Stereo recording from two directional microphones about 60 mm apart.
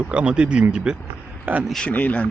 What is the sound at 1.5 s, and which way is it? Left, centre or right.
Speech, right.